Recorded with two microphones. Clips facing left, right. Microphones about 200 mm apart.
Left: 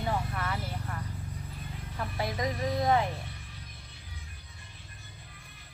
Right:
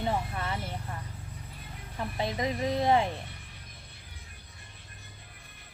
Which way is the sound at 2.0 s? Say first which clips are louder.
Right 1 dB; 20° right (ahead or behind).